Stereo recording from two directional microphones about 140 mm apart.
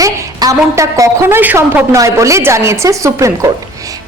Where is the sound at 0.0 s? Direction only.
25° right (ahead or behind).